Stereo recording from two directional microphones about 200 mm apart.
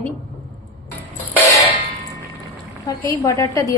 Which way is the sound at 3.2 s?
15° left (ahead or behind).